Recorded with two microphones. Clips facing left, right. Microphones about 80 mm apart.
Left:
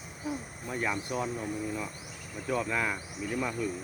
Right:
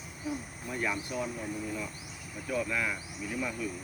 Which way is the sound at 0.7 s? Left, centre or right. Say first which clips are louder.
Left 1 dB; left.